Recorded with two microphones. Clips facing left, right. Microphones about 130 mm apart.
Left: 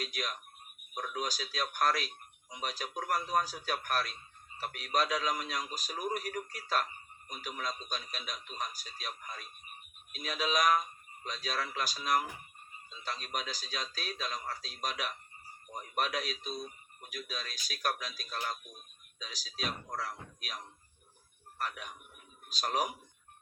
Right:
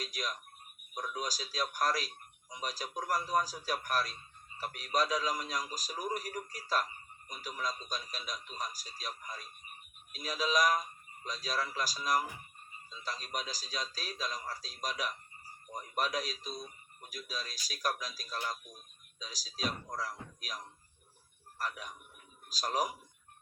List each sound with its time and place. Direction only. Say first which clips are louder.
0.0 s speech: left 1 dB; 35° right (ahead or behind)